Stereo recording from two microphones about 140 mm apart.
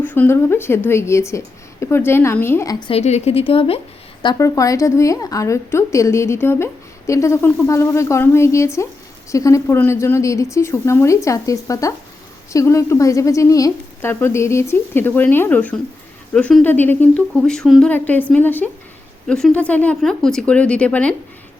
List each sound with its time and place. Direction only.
0.0 s speech: 15° left (ahead or behind)
2.8 s speech: 50° left (ahead or behind)
4.2 s a woman's voice: 25° left (ahead or behind); by 21.2 s 10° left (ahead or behind)